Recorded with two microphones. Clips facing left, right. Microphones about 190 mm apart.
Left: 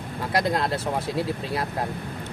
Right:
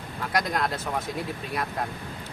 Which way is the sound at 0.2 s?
30° left (ahead or behind).